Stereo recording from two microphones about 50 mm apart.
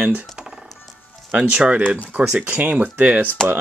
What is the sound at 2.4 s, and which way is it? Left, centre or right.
Speech, right.